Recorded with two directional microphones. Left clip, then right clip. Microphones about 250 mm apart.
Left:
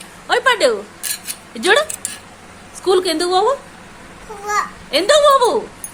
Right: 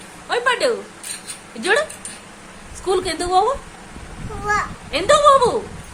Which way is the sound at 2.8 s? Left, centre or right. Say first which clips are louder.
Left 5 dB; centre.